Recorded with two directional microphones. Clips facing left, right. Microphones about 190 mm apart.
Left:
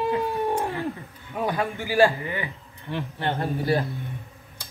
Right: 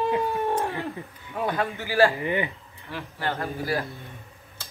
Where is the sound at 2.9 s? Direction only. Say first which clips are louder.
Left 3 dB; 25° left (ahead or behind).